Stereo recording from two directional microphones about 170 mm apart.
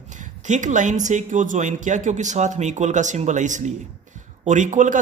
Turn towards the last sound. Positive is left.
turn(degrees=-50)  # may be behind; listen again after turning